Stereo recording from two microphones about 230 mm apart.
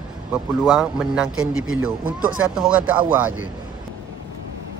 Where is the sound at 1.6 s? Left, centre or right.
Right.